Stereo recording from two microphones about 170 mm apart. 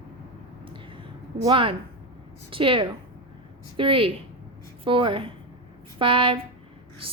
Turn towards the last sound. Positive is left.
turn(degrees=-30)  # may be behind; listen again after turning